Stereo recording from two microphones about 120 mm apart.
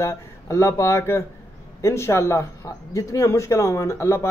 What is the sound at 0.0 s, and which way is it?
Speech, 25° left (ahead or behind).